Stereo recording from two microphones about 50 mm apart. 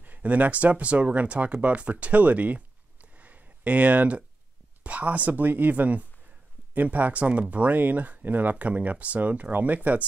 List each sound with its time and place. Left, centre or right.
0.0 s speech: right